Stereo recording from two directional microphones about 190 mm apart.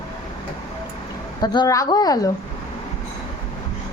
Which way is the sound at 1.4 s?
20° left (ahead or behind).